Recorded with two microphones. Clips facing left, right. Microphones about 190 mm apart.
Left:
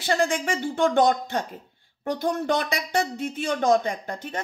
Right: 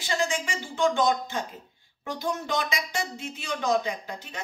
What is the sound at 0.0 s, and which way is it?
Speech, 55° left (ahead or behind).